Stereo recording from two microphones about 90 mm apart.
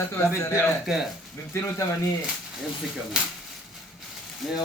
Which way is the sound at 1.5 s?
30° left (ahead or behind).